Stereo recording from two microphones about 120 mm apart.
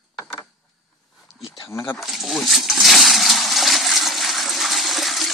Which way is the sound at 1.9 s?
Centre (ahead or behind).